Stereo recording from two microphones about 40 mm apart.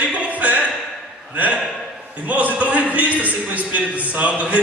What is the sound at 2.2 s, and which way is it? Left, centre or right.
A man's voice, right.